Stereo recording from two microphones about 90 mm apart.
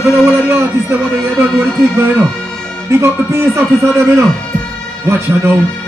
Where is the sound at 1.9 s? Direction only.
25° right (ahead or behind).